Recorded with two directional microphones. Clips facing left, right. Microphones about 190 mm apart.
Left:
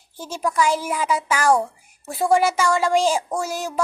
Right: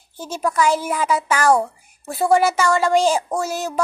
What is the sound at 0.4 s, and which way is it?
Child singing, 10° left (ahead or behind).